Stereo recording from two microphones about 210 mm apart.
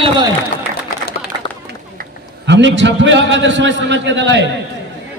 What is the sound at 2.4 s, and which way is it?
A man's voice, 55° right (ahead or behind).